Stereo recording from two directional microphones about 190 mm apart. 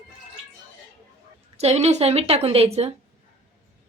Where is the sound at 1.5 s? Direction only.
35° right (ahead or behind).